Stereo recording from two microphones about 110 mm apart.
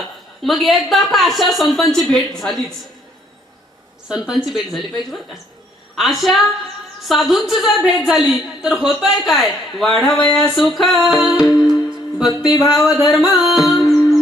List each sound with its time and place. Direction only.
0.4 s a woman's voice: centre (ahead or behind)
4.1 s a woman's voice: 5° right (ahead or behind)
12.1 s music: 5° right (ahead or behind)
12.5 s speech: 35° left (ahead or behind)
13.1 s music: centre (ahead or behind)